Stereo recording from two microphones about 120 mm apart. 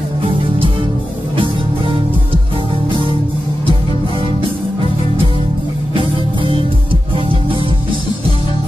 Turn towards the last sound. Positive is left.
turn(degrees=-45)  # may be behind; listen again after turning